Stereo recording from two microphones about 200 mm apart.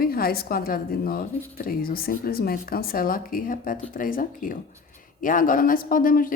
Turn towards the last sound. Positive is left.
turn(degrees=45)  # may be behind; listen again after turning